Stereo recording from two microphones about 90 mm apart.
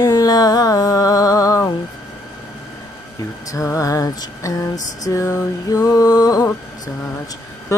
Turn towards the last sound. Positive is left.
turn(degrees=35)  # may be behind; listen again after turning